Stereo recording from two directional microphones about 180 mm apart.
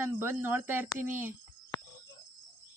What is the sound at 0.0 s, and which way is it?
Speech, 10° right (ahead or behind).